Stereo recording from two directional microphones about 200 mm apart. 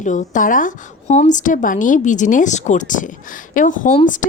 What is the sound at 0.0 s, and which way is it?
Speech, 40° left (ahead or behind).